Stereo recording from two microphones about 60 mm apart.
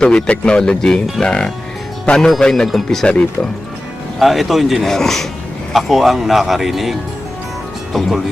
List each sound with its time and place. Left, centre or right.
0.0 s speech: centre
4.2 s speech: centre
7.9 s speech: centre